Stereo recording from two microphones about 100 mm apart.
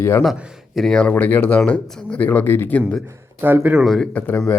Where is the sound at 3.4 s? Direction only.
20° right (ahead or behind).